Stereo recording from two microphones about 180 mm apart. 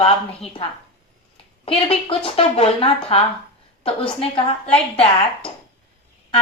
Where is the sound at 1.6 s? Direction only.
30° left (ahead or behind).